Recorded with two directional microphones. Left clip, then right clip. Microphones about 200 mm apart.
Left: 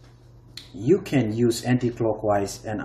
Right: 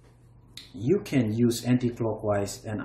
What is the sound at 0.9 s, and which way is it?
Speech, 10° right (ahead or behind).